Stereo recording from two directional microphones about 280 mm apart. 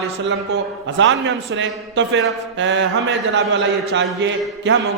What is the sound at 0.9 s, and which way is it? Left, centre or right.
A man's voice, right.